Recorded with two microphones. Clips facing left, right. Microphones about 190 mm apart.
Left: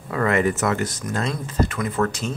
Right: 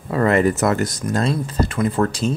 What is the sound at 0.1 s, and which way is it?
Speech, 35° right (ahead or behind).